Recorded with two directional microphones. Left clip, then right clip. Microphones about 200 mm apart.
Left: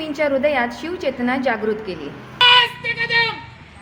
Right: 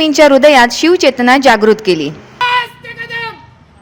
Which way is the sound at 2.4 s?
20° right (ahead or behind).